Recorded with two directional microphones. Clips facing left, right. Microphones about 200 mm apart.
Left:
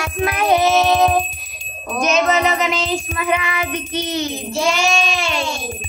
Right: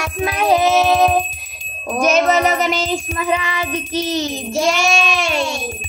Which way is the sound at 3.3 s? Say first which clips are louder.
Even; 30° right (ahead or behind).